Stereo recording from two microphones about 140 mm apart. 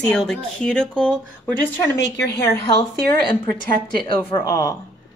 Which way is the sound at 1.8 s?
25° left (ahead or behind).